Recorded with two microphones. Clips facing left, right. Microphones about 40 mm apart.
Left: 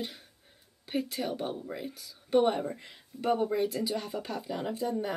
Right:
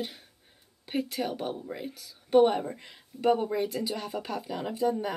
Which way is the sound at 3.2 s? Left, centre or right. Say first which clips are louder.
Right 2 dB; centre.